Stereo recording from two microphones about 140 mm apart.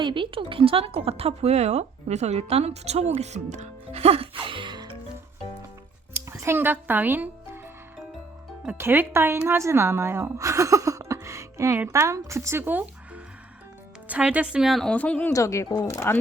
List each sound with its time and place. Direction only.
0.0 s speech: 35° right (ahead or behind)
6.1 s speech: 20° right (ahead or behind)
8.6 s a woman's voice: 15° right (ahead or behind); by 15.3 s 10° left (ahead or behind)
15.3 s speech: 25° left (ahead or behind)